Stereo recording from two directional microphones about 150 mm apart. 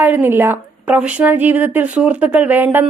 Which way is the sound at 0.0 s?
15° right (ahead or behind).